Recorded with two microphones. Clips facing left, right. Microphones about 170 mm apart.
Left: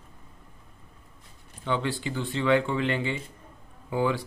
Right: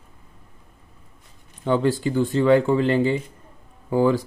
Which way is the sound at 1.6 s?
40° right (ahead or behind).